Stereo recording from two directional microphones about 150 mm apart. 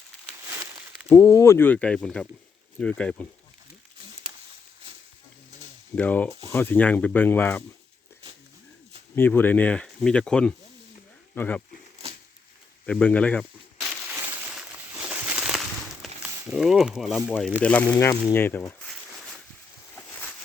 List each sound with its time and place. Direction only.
0.4 s a sound: 20° right (ahead or behind)
1.0 s speech: 20° left (ahead or behind)
6.0 s speech: 10° left (ahead or behind)
9.1 s speech: 15° left (ahead or behind)
12.8 s speech: 10° left (ahead or behind)
13.8 s crushing: 5° right (ahead or behind)
14.1 s crumpling: 15° right (ahead or behind)
14.9 s a sound: 15° right (ahead or behind)
16.5 s speech: 5° right (ahead or behind)
17.2 s speech: 10° left (ahead or behind)
17.8 s speech: 20° left (ahead or behind); by 19.4 s centre (ahead or behind)
20.0 s a sound: 10° left (ahead or behind)